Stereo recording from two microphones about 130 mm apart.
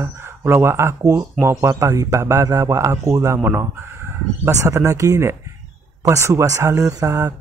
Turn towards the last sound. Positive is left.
turn(degrees=-25)  # may be behind; listen again after turning